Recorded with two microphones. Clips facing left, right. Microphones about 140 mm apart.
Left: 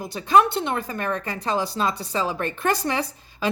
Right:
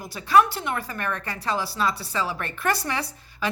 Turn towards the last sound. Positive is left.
turn(degrees=20)  # may be behind; listen again after turning